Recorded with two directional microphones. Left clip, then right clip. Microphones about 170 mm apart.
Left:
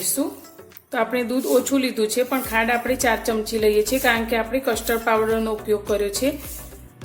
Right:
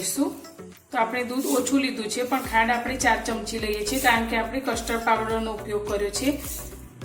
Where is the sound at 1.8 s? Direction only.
60° left (ahead or behind).